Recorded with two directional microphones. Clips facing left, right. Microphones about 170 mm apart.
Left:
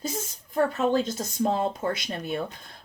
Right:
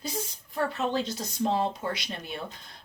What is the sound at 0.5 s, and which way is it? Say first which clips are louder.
Speech: left 5 dB; 45° left (ahead or behind).